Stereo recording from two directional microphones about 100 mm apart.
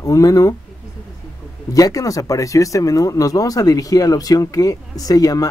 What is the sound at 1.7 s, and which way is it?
Speech, 35° left (ahead or behind).